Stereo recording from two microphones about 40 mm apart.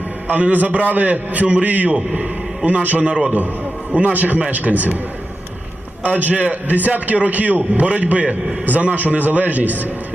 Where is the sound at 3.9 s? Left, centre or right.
Right.